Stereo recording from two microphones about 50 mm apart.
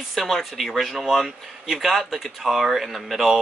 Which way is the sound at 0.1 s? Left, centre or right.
Centre.